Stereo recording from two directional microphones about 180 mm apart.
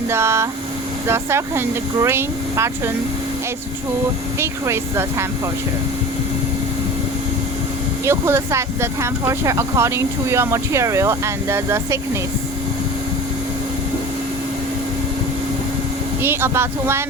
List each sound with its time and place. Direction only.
0.1 s speech: 15° right (ahead or behind)
4.4 s speech: 15° right (ahead or behind)
8.0 s speech: 15° right (ahead or behind)
16.2 s speech: 10° right (ahead or behind)